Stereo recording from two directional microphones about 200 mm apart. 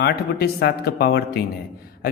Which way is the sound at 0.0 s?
50° left (ahead or behind).